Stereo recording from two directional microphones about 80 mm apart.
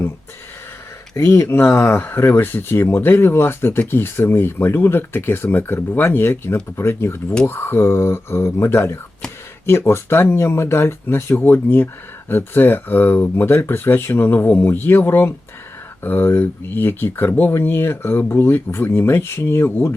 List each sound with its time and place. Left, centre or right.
1.1 s speech: left